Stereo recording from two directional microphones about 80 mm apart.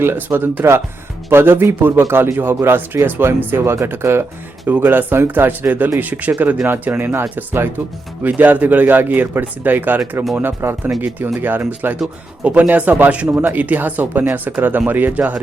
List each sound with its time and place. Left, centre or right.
0.0 s speech: right